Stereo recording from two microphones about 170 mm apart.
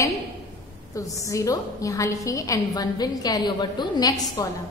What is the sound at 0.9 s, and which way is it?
A woman's voice, 20° left (ahead or behind).